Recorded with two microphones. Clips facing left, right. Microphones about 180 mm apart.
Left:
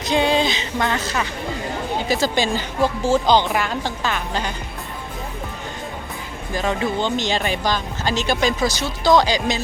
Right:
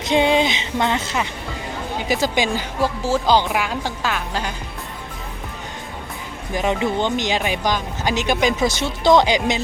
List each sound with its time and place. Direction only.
0.1 s speech: 20° right (ahead or behind)
6.5 s speech: 20° right (ahead or behind)